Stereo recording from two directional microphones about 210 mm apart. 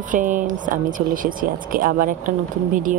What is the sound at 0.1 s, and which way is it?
Speech, 40° right (ahead or behind).